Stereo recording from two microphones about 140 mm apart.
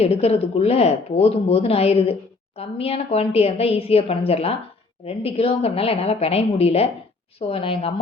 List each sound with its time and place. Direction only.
0.0 s speech: 45° left (ahead or behind)